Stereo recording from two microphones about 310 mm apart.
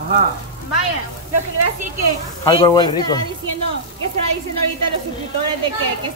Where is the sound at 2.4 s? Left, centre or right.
Centre.